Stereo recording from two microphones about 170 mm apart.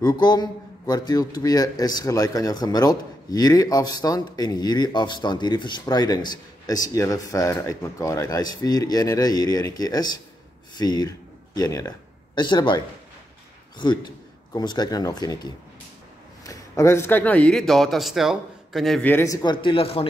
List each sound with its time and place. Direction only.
0.0 s a man's voice: 25° left (ahead or behind)
14.5 s a man's voice: 25° left (ahead or behind)